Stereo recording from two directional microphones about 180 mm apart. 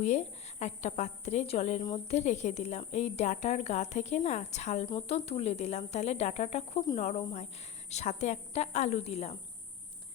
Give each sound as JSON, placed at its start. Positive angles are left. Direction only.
{"t": 0.0, "sound": "speech", "side_deg": 40}